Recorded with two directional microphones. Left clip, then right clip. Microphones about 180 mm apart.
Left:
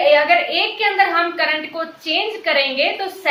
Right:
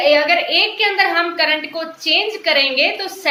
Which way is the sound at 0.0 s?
25° right (ahead or behind).